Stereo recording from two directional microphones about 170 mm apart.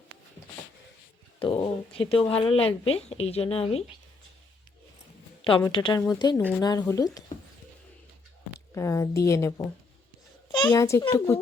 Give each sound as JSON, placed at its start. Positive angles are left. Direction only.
{"t": 1.4, "sound": "speech", "side_deg": 30}
{"t": 5.5, "sound": "a woman's voice", "side_deg": 30}
{"t": 8.7, "sound": "a woman's voice", "side_deg": 15}